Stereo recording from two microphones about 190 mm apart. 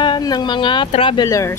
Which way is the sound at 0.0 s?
20° left (ahead or behind).